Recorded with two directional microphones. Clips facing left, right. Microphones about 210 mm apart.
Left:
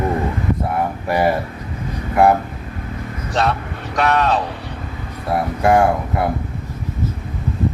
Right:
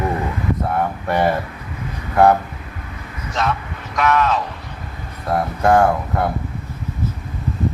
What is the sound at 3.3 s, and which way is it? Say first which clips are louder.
Speech: left 3 dB; 35° left (ahead or behind).